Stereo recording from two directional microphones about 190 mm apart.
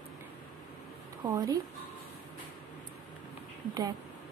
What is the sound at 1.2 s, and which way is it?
Speech, 20° right (ahead or behind).